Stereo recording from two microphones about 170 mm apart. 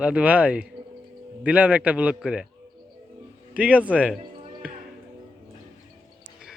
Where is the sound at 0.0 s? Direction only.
5° right (ahead or behind).